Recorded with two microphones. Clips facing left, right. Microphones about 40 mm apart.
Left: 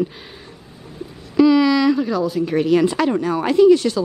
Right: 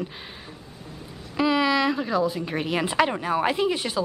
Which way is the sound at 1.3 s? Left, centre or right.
Centre.